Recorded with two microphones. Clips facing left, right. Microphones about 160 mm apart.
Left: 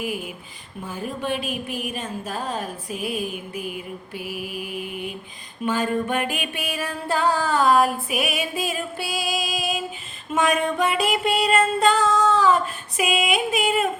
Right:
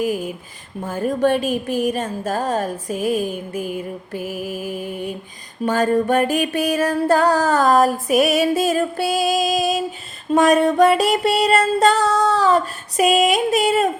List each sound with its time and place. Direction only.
0.0 s a woman's voice: 40° right (ahead or behind)